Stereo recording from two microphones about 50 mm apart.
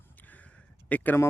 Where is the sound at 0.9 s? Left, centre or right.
Left.